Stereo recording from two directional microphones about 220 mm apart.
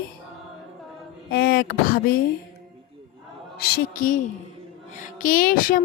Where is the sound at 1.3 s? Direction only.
45° left (ahead or behind).